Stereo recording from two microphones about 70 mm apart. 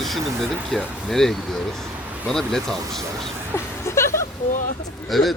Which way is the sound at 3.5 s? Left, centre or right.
Left.